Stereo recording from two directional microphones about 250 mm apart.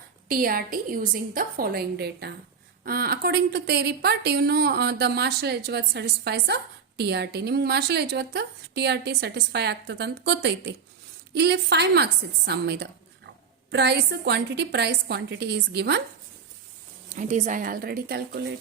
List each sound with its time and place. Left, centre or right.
0.3 s speech: right
17.2 s speech: right